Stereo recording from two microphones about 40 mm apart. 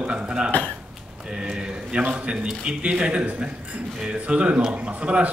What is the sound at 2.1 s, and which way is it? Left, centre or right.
A man's voice, right.